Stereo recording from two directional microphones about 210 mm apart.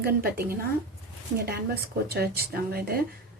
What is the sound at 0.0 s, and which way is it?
Speech, 45° right (ahead or behind).